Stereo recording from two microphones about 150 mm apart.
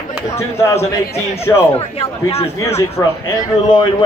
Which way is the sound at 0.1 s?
20° left (ahead or behind).